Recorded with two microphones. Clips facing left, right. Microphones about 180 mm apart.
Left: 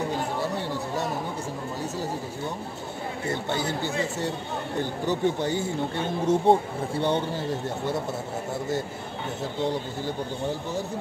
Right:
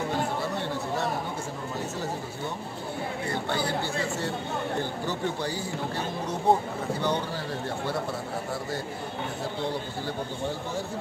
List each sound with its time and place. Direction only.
3.3 s speech: 20° left (ahead or behind)